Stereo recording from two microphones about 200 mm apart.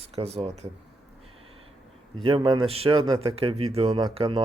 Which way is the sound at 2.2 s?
25° right (ahead or behind).